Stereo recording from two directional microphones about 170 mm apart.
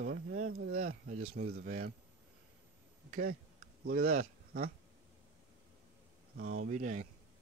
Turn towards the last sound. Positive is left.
turn(degrees=-45)  # may be behind; listen again after turning